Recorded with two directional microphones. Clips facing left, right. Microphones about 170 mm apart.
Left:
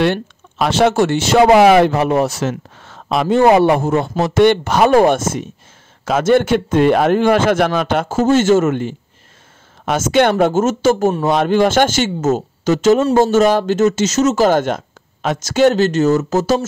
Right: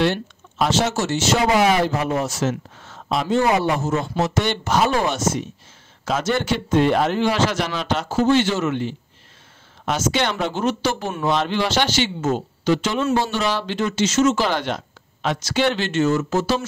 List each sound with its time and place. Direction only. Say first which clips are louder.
0.0 s speech: left 4 dB; 60° left (ahead or behind); by 16.6 s 40° left (ahead or behind)